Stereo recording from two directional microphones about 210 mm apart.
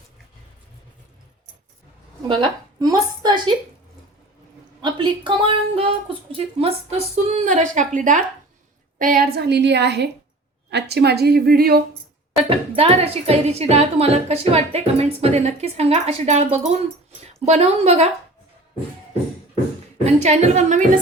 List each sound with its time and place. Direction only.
2.2 s a woman's voice: 25° right (ahead or behind)
4.8 s a woman's voice: 20° right (ahead or behind); by 11.8 s 45° right (ahead or behind)
12.4 s a woman's voice: 25° right (ahead or behind)
20.1 s speech: 30° right (ahead or behind)